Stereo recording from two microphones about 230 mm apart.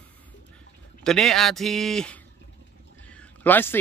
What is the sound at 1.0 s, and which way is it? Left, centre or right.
Speech, centre.